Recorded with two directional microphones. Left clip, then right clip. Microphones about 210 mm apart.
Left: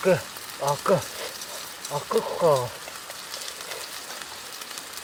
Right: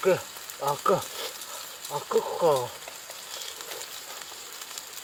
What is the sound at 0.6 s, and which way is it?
Speech, 35° right (ahead or behind).